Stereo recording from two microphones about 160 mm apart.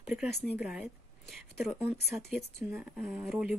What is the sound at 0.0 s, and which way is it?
Speech, 5° right (ahead or behind).